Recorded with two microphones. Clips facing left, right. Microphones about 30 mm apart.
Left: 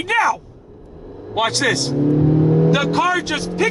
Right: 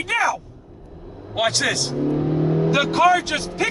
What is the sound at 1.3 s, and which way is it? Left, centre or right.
Speech, centre.